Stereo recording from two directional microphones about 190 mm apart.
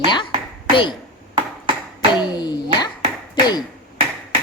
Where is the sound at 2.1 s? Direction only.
20° left (ahead or behind).